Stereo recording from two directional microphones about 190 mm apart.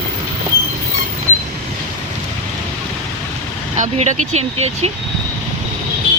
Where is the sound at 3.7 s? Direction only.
40° right (ahead or behind).